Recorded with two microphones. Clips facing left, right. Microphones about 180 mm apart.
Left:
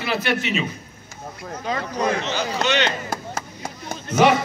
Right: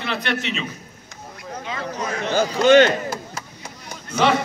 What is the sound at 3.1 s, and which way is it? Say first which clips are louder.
Chop: left 1 dB; 50° left (ahead or behind).